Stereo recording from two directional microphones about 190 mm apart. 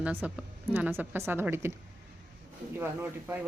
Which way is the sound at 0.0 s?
10° right (ahead or behind).